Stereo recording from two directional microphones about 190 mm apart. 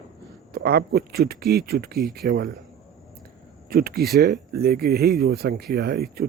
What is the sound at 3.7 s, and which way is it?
A man's voice, 55° right (ahead or behind).